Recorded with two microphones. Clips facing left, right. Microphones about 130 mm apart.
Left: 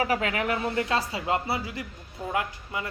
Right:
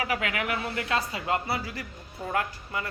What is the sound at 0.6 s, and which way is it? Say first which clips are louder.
Speech: left 3 dB; 20° left (ahead or behind).